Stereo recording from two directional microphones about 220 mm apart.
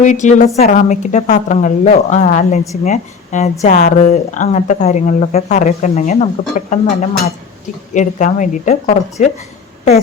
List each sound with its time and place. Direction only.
0.0 s a woman's voice: 35° left (ahead or behind)